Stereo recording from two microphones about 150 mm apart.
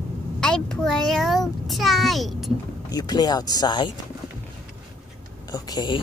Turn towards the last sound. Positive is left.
turn(degrees=30)  # may be behind; listen again after turning